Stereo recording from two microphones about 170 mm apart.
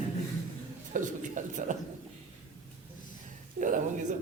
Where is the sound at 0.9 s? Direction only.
50° right (ahead or behind).